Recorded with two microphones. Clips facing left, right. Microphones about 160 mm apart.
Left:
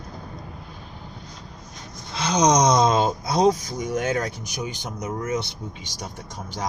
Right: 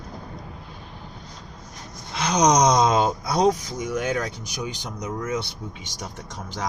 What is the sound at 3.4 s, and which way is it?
Speech, 40° left (ahead or behind).